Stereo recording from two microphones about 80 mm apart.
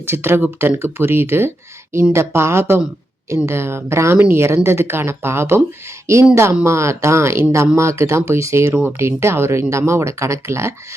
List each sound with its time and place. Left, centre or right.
0.0 s speech: right